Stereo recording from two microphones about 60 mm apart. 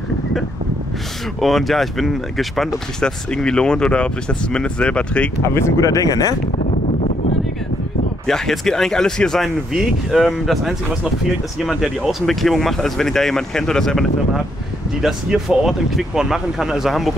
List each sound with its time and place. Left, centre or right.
1.4 s speech: centre
3.0 s speech: centre
5.4 s speech: left
5.9 s speech: left
8.3 s speech: centre
9.7 s speech: centre
15.0 s speech: centre